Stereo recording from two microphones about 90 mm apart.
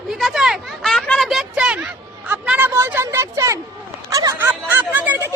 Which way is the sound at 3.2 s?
35° right (ahead or behind).